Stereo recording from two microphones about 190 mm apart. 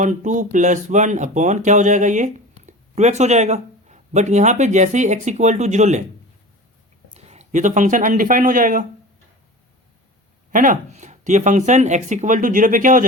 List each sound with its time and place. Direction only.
0.0 s speech: 40° right (ahead or behind)
7.1 s speech: 35° right (ahead or behind)
10.5 s speech: 45° right (ahead or behind)